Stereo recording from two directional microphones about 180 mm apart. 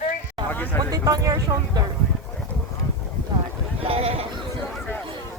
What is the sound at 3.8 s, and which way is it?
Sheep, 30° right (ahead or behind).